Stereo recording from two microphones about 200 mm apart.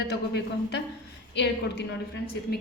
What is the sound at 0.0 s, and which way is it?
A woman's voice, 55° left (ahead or behind).